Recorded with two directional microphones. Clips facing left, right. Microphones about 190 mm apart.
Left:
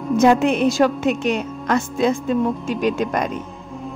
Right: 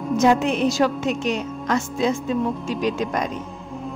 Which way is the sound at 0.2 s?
60° left (ahead or behind).